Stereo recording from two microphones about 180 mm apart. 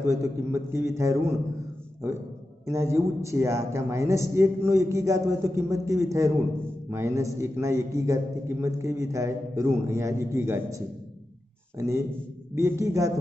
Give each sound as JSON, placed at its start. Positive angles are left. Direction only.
{"t": 0.0, "sound": "a man's voice", "side_deg": -15}
{"t": 2.6, "sound": "a man's voice", "side_deg": -15}
{"t": 12.5, "sound": "a man's voice", "side_deg": -15}